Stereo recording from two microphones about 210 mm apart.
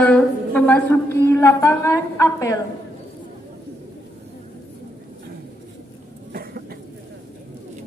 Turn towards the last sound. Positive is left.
turn(degrees=-45)  # may be behind; listen again after turning